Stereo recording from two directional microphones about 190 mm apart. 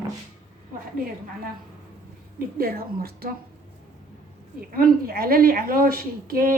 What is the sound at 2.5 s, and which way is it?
Speech, 50° right (ahead or behind).